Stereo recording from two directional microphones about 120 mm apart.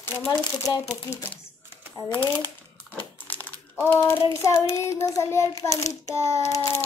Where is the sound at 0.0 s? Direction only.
20° left (ahead or behind).